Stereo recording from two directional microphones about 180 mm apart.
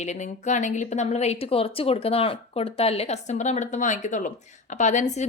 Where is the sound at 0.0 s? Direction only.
40° left (ahead or behind).